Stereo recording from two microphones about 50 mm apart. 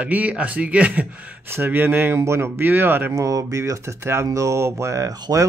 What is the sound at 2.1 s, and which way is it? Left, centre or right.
Speech, right.